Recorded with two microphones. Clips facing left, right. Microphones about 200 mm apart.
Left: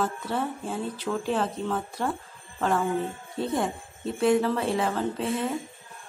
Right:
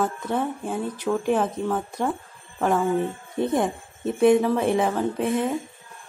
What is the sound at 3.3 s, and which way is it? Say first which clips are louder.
Speech: right 5 dB; 20° right (ahead or behind).